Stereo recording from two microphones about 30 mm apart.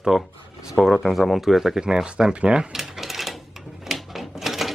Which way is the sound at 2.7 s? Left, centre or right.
Centre.